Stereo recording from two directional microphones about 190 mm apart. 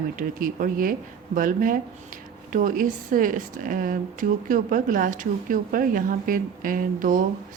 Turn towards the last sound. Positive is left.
turn(degrees=-45)  # may be behind; listen again after turning